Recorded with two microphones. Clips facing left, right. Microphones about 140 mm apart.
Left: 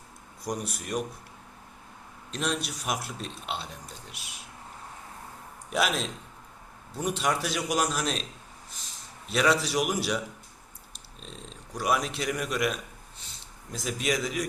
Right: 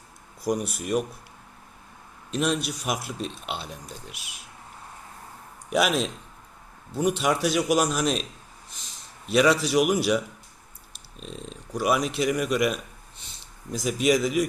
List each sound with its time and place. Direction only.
0.4 s speech: 5° right (ahead or behind)
2.3 s a man's voice: 5° right (ahead or behind)
5.7 s a man's voice: centre (ahead or behind)
9.3 s a man's voice: 5° right (ahead or behind)
13.7 s a man's voice: 5° right (ahead or behind)